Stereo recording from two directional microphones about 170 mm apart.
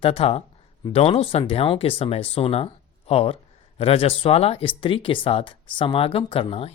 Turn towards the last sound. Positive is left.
turn(degrees=35)  # may be behind; listen again after turning